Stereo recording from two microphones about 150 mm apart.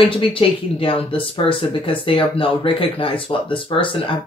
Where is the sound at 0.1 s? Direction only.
35° left (ahead or behind).